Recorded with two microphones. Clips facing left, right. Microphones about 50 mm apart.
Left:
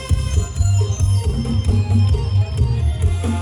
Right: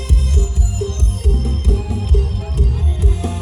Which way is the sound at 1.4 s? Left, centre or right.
Left.